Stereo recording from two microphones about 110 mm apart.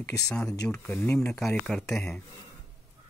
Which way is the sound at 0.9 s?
20° left (ahead or behind).